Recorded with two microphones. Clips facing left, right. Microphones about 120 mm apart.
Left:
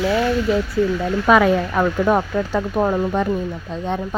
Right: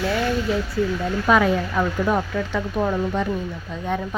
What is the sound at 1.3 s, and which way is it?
Speech, 60° left (ahead or behind).